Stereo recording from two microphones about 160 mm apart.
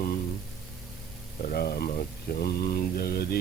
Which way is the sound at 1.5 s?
75° left (ahead or behind).